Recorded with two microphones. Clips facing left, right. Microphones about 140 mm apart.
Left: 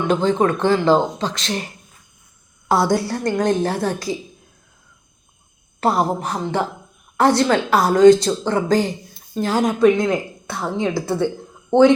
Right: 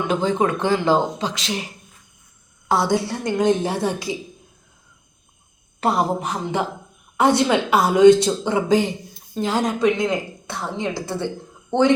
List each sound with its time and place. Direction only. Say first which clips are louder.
0.1 s speech: left 3 dB; 10° right (ahead or behind)
2.6 s a woman's voice: left 2 dB; 5° left (ahead or behind)
5.8 s a woman's voice: left 1 dB; centre (ahead or behind)
9.7 s speech: left 4 dB; 15° right (ahead or behind)
11.7 s speech: left 6 dB; 15° left (ahead or behind)